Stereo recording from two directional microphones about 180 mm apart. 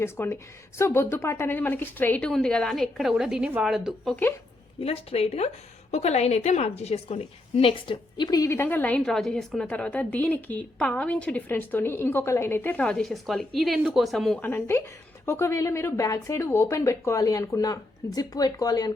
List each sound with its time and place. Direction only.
0.0 s a woman's voice: 15° left (ahead or behind)
4.8 s a woman's voice: 35° left (ahead or behind)